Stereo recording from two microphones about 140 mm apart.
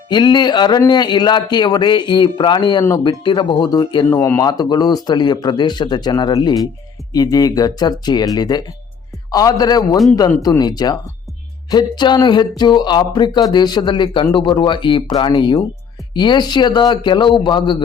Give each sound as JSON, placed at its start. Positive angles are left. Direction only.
{"t": 0.1, "sound": "speech", "side_deg": 30}